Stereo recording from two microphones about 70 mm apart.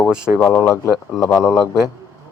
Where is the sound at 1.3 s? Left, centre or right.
Centre.